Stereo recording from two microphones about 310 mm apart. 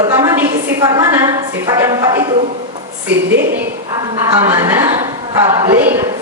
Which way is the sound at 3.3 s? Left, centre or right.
Right.